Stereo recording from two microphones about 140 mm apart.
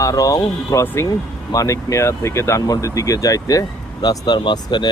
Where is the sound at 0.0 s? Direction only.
25° left (ahead or behind).